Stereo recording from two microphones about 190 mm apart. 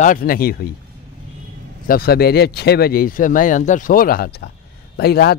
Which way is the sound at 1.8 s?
50° left (ahead or behind).